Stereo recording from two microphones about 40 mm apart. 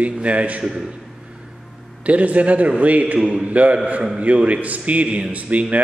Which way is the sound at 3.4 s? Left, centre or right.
Right.